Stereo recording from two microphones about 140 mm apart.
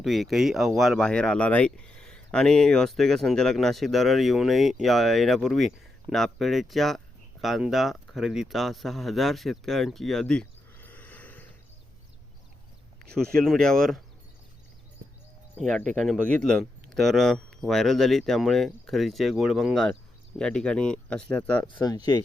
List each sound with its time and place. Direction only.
0.0 s speech: centre (ahead or behind)
13.1 s speech: 5° left (ahead or behind)
16.3 s speech: 5° left (ahead or behind)
21.8 s speech: 30° left (ahead or behind)